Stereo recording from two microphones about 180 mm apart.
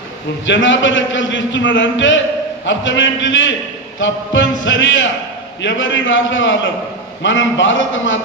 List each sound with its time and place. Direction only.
0.5 s a man's voice: 90° left